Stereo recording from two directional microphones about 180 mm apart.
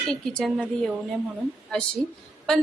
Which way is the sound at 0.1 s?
Centre (ahead or behind).